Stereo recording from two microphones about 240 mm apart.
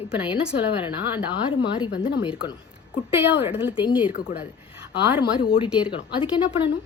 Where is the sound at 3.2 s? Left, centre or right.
Centre.